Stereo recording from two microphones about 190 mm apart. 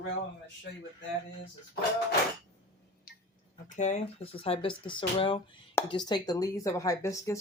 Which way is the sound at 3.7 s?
40° left (ahead or behind).